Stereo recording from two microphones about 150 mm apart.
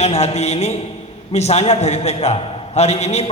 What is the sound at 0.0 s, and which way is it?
A man's voice, 45° left (ahead or behind).